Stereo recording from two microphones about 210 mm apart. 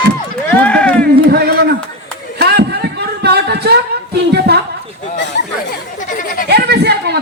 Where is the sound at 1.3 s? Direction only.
50° right (ahead or behind).